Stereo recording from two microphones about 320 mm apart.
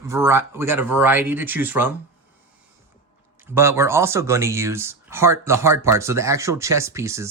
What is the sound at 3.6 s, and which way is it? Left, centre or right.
Speech, centre.